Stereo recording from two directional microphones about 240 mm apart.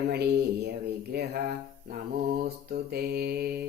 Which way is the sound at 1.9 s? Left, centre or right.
Right.